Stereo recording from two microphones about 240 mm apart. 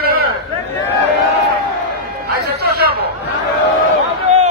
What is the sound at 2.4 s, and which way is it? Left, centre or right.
Chatter, right.